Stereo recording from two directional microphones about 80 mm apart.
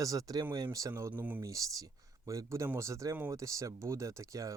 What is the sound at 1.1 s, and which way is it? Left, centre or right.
Speech, right.